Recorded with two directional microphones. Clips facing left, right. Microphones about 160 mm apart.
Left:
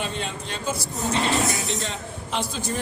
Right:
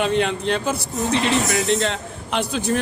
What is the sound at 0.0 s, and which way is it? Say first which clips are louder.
A man's voice: right 10 dB; 70° right (ahead or behind).